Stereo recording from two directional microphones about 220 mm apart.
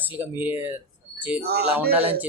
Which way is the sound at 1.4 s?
45° right (ahead or behind).